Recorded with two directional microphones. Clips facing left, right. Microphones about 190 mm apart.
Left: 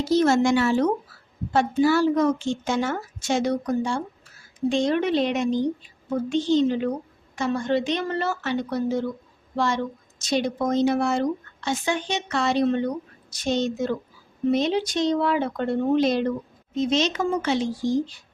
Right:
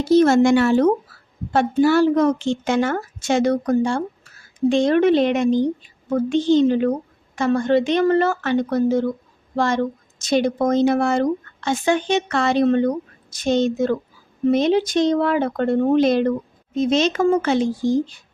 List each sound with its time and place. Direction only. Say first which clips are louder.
0.0 s a woman's voice: right 5 dB; 55° right (ahead or behind)